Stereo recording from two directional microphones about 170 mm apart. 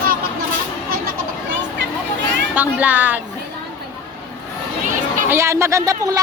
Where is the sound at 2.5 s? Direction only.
10° right (ahead or behind).